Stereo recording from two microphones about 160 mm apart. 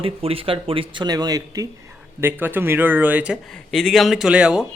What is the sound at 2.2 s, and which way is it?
A man's voice, 15° right (ahead or behind).